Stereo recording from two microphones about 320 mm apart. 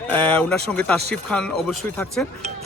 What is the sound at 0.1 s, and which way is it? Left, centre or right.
Speech, centre.